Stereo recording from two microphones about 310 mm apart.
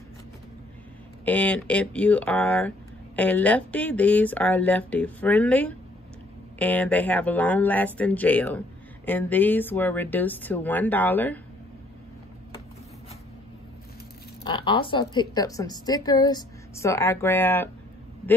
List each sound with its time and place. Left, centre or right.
1.2 s speech: centre
14.4 s a woman's voice: centre